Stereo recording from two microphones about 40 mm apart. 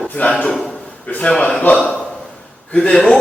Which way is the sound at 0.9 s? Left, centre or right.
Left.